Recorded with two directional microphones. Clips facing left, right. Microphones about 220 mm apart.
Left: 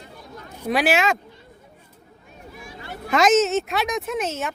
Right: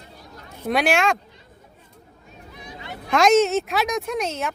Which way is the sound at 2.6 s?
20° right (ahead or behind).